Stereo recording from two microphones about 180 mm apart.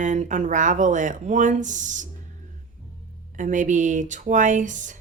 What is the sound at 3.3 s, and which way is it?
Speech, 45° right (ahead or behind).